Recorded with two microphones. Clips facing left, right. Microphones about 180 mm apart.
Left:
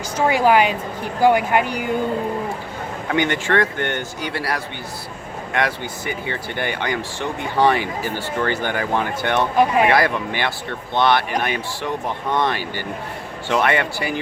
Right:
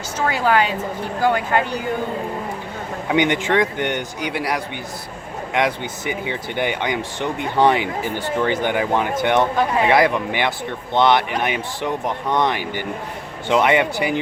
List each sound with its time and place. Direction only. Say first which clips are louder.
0.3 s speech: left 3 dB; 15° left (ahead or behind)
3.1 s speech: right 2 dB; 20° right (ahead or behind)